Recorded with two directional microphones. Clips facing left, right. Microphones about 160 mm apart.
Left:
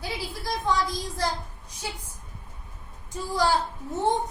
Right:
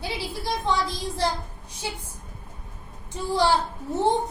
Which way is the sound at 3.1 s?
30° right (ahead or behind).